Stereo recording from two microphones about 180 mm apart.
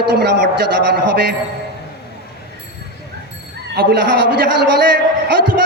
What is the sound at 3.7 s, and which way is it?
A man's voice, 60° right (ahead or behind).